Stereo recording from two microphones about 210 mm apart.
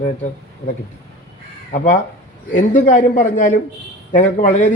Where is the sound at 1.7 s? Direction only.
35° left (ahead or behind).